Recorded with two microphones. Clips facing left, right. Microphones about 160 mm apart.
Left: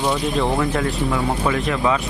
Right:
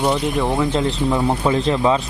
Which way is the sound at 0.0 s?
20° right (ahead or behind).